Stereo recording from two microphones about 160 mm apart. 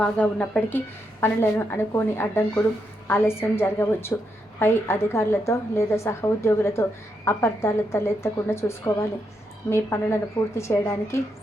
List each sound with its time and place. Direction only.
0.0 s a woman's voice: 5° left (ahead or behind)